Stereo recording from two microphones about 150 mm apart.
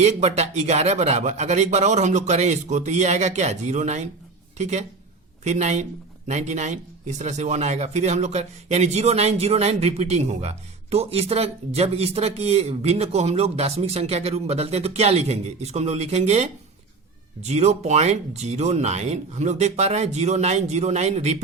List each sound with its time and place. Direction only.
0.0 s speech: 50° right (ahead or behind)